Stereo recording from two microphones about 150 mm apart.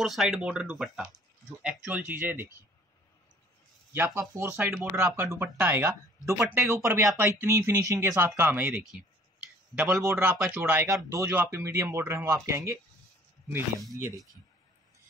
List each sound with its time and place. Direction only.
0.0 s speech: centre (ahead or behind)
3.9 s speech: 15° right (ahead or behind)
10.0 s speech: 15° right (ahead or behind)